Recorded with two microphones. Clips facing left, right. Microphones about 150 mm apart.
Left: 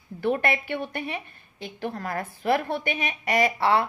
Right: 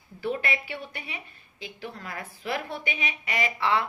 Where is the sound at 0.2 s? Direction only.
55° left (ahead or behind).